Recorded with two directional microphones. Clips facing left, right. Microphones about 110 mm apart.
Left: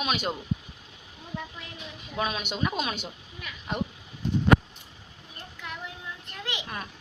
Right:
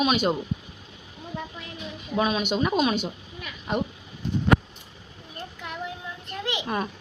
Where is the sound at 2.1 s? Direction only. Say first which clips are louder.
Right 7 dB; 10° right (ahead or behind).